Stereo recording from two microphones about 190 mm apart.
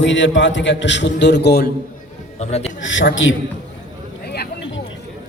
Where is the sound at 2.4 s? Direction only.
35° left (ahead or behind).